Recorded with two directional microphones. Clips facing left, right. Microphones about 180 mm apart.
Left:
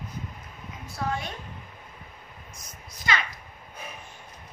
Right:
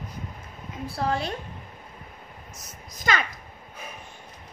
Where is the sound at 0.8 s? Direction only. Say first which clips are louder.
Right 4 dB; 35° right (ahead or behind).